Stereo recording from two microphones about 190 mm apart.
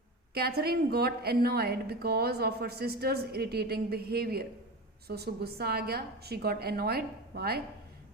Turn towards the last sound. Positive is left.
turn(degrees=-55)  # may be behind; listen again after turning